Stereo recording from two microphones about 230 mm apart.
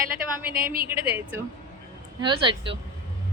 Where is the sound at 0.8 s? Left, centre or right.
Centre.